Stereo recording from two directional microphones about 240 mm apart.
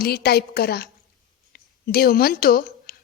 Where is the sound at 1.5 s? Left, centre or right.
Left.